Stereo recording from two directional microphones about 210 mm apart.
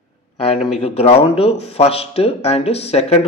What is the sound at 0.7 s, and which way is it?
Speech, 30° left (ahead or behind).